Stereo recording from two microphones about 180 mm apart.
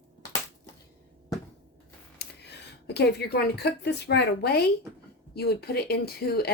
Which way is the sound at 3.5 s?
65° left (ahead or behind).